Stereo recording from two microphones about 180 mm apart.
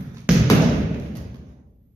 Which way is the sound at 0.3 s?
5° right (ahead or behind).